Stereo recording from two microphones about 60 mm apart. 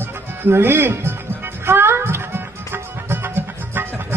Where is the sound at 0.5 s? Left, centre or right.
Right.